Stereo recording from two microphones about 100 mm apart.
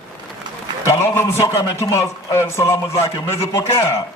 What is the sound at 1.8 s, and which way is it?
A man's voice, 30° left (ahead or behind).